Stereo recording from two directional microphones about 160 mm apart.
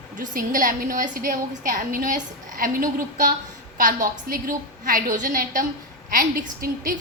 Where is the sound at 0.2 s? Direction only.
60° right (ahead or behind).